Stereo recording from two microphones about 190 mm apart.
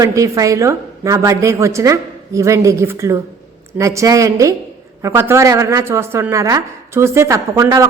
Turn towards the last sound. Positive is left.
turn(degrees=-15)  # may be behind; listen again after turning